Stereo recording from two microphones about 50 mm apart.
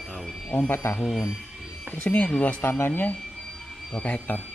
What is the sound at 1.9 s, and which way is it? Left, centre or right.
Speech, left.